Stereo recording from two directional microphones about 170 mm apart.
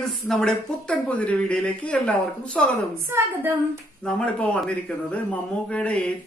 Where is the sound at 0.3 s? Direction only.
5° left (ahead or behind).